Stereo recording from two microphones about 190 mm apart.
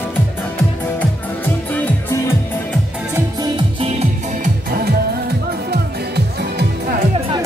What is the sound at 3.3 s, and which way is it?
Music, 25° right (ahead or behind).